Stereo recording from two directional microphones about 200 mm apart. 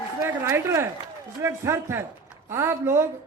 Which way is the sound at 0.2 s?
15° right (ahead or behind).